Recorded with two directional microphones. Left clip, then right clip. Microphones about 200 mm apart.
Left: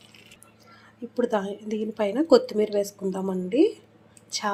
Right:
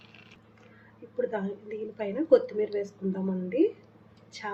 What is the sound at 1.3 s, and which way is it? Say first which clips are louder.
A woman's voice: left 7 dB; 25° left (ahead or behind).